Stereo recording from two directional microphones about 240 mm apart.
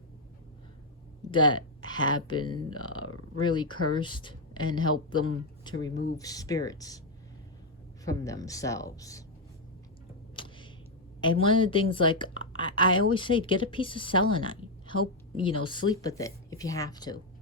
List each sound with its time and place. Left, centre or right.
1.3 s speech: centre
3.0 s a sound: left
3.4 s speech: centre
8.0 s speech: centre
11.2 s speech: left